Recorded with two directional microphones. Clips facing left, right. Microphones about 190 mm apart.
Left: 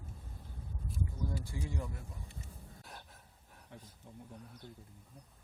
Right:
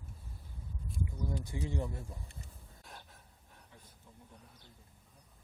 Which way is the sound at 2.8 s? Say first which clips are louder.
Right 2 dB; centre (ahead or behind).